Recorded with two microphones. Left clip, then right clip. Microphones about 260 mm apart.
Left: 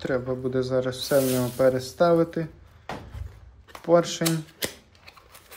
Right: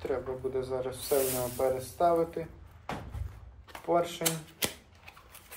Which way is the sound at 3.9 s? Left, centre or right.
Left.